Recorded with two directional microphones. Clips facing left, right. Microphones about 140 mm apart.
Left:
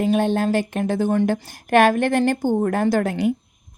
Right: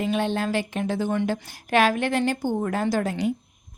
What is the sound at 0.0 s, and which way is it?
A woman's voice, 45° left (ahead or behind).